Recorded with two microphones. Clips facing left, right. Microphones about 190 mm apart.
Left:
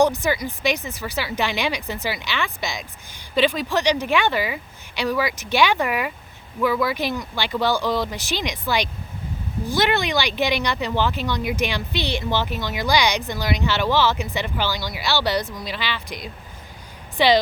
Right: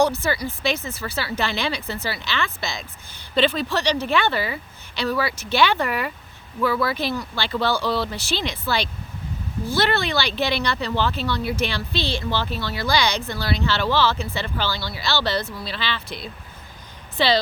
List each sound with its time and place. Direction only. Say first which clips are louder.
0.0 s speech: left 2 dB; 15° left (ahead or behind)